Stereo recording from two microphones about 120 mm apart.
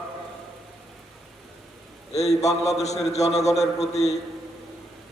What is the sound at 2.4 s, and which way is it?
A man's voice, 65° left (ahead or behind).